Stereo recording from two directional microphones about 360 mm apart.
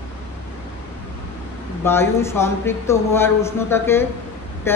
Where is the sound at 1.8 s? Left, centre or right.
Centre.